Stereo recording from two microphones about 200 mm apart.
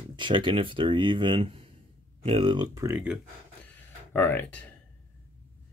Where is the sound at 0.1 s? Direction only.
25° right (ahead or behind).